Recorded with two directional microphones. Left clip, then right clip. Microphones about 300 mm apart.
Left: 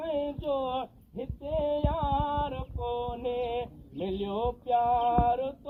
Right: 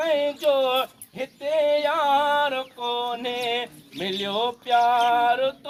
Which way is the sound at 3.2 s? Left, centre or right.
Centre.